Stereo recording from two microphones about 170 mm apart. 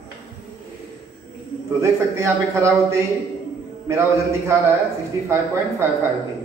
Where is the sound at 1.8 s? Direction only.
15° right (ahead or behind).